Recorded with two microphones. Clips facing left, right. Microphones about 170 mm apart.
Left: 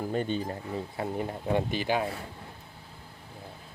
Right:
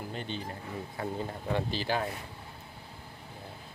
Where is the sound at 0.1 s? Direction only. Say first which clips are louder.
Left 8 dB; 45° left (ahead or behind).